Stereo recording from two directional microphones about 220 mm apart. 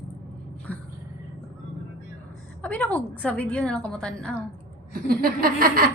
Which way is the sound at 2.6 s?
5° left (ahead or behind).